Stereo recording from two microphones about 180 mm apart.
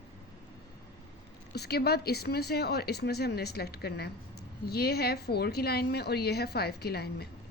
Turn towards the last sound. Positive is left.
turn(degrees=60)  # may be behind; listen again after turning